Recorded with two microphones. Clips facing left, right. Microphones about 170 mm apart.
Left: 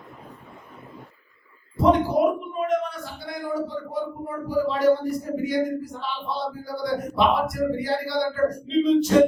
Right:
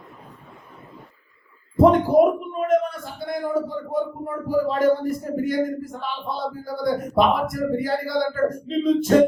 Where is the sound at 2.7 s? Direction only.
50° right (ahead or behind).